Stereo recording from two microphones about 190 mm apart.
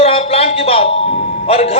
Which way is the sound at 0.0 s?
30° left (ahead or behind).